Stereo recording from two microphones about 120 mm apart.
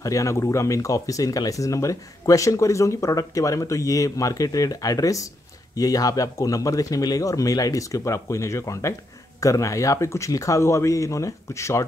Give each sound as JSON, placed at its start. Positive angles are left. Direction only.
{"t": 0.0, "sound": "speech", "side_deg": 25}